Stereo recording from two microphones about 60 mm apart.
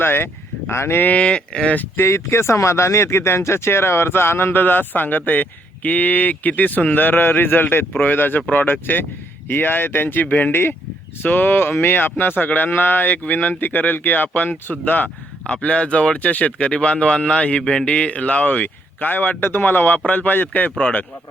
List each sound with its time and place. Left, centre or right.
0.0 s speech: left
1.0 s speech: left
2.0 s speech: left